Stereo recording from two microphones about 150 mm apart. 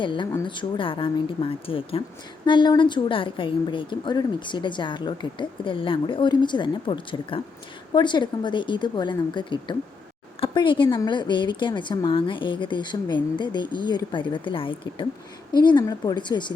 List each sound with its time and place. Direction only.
0.0 s a woman's voice: 30° left (ahead or behind)